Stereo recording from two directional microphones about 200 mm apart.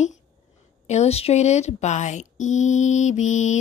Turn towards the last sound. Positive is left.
turn(degrees=35)  # may be behind; listen again after turning